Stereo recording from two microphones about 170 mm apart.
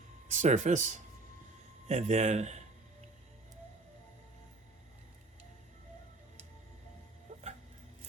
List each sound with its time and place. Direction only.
0.3 s speech: 45° right (ahead or behind)
7.3 s music: 45° right (ahead or behind)